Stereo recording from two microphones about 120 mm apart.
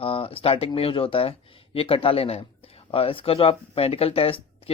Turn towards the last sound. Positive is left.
turn(degrees=50)  # may be behind; listen again after turning